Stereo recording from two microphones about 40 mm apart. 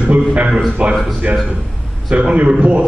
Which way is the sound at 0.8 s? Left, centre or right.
Right.